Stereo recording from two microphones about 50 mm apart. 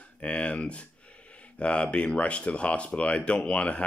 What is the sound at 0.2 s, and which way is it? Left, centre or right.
Speech, left.